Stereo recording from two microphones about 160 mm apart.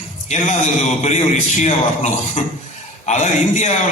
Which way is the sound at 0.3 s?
45° left (ahead or behind).